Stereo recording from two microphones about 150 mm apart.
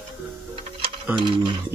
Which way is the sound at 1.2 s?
35° right (ahead or behind).